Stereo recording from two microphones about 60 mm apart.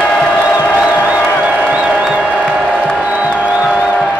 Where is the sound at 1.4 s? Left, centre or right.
Right.